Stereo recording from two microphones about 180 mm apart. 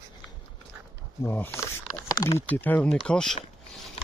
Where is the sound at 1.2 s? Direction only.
15° left (ahead or behind).